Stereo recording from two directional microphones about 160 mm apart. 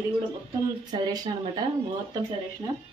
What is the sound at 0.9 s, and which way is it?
Speech, 25° right (ahead or behind).